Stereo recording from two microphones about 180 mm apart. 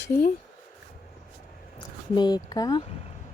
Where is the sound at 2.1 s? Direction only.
20° left (ahead or behind).